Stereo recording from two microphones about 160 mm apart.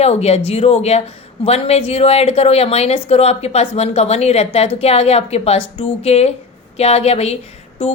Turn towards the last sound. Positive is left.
turn(degrees=40)  # may be behind; listen again after turning